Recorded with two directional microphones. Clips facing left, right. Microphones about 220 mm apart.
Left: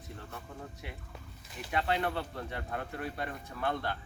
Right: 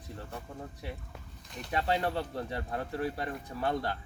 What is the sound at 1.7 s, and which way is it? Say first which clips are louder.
Speech: right 2 dB; 35° right (ahead or behind).